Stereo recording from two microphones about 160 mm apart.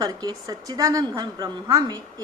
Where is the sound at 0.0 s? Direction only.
25° right (ahead or behind).